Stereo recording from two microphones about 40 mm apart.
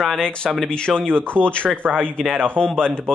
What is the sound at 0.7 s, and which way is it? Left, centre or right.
Speech, left.